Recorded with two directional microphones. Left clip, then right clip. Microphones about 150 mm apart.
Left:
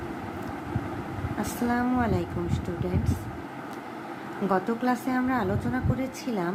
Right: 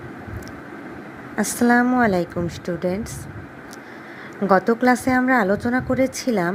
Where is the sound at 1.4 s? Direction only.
60° right (ahead or behind).